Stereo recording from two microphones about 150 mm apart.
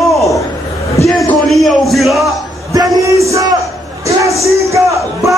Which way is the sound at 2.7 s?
25° right (ahead or behind).